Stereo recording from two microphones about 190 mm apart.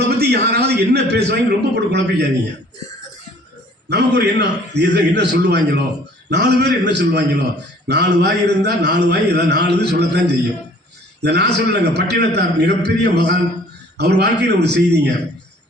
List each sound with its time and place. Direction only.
0.1 s a man's voice: 60° right (ahead or behind)
3.8 s a man's voice: 60° right (ahead or behind)